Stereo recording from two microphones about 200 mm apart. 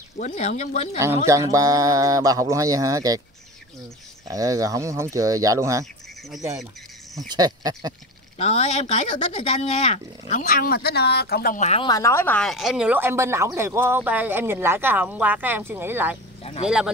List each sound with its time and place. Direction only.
0.2 s speech: 35° left (ahead or behind)
0.9 s speech: 15° right (ahead or behind)
4.3 s speech: 15° right (ahead or behind)
7.2 s speech: 20° right (ahead or behind)
8.4 s speech: 30° left (ahead or behind)
10.4 s speech: 45° left (ahead or behind)
11.8 s speech: 15° left (ahead or behind); by 16.9 s 5° right (ahead or behind)